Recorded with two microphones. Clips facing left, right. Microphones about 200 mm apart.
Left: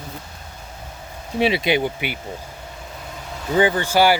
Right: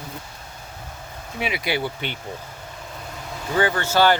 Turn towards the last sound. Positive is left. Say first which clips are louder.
# left 2 dB
turn(degrees=10)  # may be behind; listen again after turning